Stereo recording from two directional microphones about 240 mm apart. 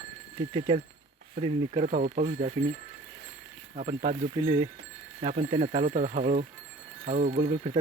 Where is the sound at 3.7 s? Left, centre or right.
Right.